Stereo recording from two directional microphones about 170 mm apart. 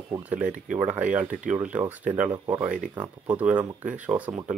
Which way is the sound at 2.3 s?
25° right (ahead or behind).